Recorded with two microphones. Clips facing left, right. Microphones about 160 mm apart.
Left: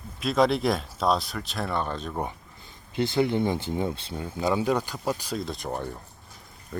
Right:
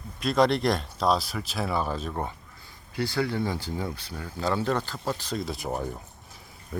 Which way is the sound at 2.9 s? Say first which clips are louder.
Left 4 dB; 20° left (ahead or behind).